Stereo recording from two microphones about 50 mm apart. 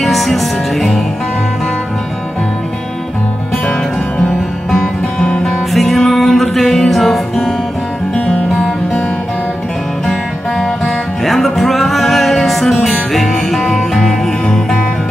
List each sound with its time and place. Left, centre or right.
0.0 s music: centre
4.6 s music: centre
5.7 s music: centre
11.2 s music: centre